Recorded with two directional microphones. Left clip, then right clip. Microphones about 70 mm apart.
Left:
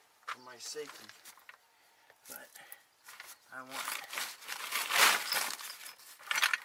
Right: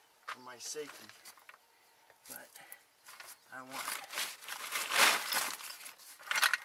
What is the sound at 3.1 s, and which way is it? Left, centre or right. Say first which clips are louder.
Crumpling: left 1 dB; centre.